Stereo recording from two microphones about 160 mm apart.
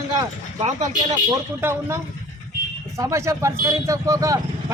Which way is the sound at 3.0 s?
20° right (ahead or behind).